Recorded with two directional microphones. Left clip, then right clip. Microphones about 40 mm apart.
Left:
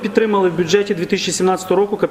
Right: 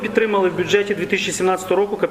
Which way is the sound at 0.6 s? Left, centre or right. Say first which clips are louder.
Left 2 dB; left.